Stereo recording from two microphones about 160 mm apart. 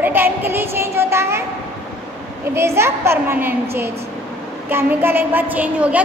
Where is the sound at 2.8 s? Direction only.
15° right (ahead or behind).